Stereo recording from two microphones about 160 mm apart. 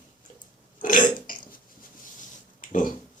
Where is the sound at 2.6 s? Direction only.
55° left (ahead or behind).